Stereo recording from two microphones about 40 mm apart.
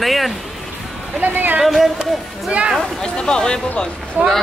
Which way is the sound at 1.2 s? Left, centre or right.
Right.